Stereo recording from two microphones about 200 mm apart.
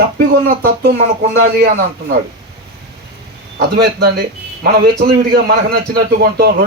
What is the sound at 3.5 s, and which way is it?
Speech, 50° right (ahead or behind).